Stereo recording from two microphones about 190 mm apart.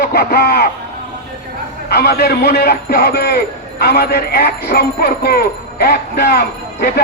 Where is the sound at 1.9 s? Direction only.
55° left (ahead or behind).